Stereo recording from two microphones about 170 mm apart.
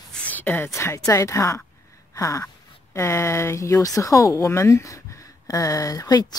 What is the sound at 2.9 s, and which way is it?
A woman's voice, 15° left (ahead or behind).